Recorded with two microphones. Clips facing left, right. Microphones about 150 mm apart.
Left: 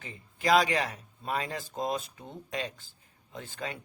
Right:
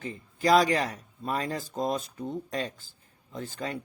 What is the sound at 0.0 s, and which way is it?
Speech, 40° right (ahead or behind).